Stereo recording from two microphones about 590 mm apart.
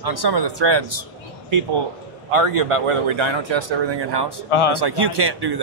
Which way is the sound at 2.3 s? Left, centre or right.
Right.